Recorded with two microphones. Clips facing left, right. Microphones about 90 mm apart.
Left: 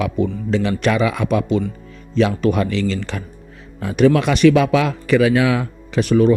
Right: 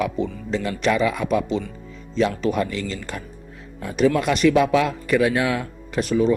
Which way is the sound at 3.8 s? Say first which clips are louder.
Left 5 dB; 80° left.